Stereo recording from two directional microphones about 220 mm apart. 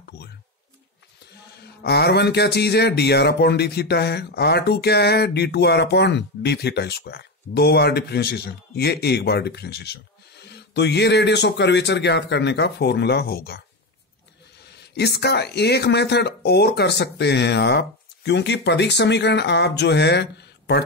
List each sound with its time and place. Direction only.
1.8 s speech: 50° left (ahead or behind)
14.8 s speech: 50° left (ahead or behind)